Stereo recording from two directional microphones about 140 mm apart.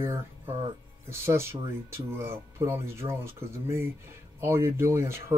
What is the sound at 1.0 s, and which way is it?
Speech, 20° right (ahead or behind).